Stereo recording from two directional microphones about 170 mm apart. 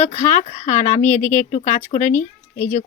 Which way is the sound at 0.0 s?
40° left (ahead or behind).